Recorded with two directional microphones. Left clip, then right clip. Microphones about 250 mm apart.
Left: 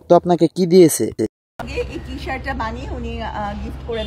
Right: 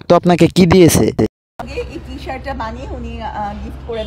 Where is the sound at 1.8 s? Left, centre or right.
Centre.